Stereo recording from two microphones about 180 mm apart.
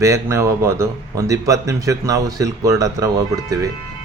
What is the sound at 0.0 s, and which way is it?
Speech, 15° right (ahead or behind).